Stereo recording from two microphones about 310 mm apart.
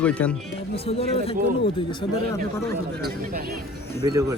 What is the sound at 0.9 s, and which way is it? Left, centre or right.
Speech, centre.